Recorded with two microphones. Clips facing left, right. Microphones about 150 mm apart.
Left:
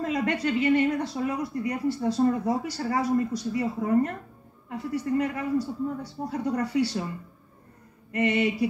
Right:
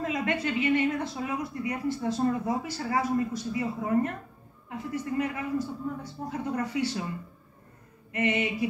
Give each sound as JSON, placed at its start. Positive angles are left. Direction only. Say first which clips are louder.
{"t": 0.0, "sound": "a woman's voice", "louder": "left 3 dB", "side_deg": 35}
{"t": 8.1, "sound": "a woman's voice", "louder": "left 4 dB", "side_deg": 35}